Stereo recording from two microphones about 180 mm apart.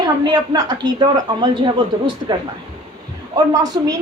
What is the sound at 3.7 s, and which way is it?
Speech, 20° right (ahead or behind).